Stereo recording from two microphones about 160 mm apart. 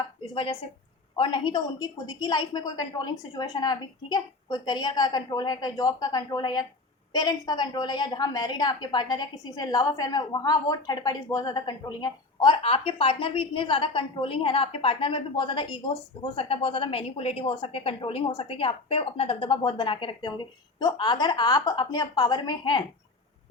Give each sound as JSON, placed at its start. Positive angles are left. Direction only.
{"t": 1.1, "sound": "a woman's voice", "side_deg": 30}